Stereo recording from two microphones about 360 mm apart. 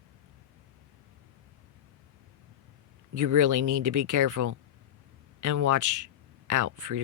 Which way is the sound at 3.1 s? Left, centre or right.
Right.